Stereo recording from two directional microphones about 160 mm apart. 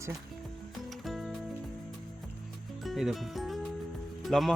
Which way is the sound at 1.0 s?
Centre (ahead or behind).